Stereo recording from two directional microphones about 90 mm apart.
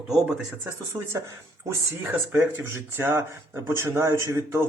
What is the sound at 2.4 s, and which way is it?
A man's voice, 30° right (ahead or behind).